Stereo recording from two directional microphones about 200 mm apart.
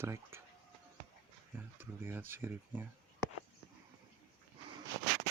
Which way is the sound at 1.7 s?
10° right (ahead or behind).